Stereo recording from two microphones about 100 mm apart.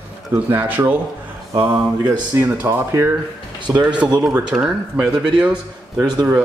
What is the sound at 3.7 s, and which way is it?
Speech, 5° right (ahead or behind).